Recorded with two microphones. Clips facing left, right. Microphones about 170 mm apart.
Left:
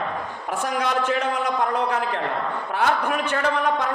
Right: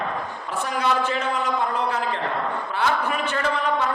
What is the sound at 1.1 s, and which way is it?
A man's voice, 65° left (ahead or behind).